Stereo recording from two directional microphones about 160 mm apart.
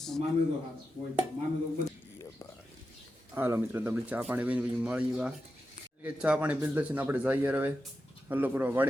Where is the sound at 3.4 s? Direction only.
15° right (ahead or behind).